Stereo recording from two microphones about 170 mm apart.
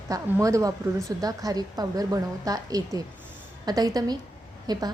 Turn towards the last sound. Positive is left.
turn(degrees=-25)  # may be behind; listen again after turning